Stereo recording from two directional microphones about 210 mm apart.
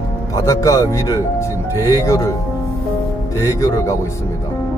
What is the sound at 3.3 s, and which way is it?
Speech, 15° left (ahead or behind).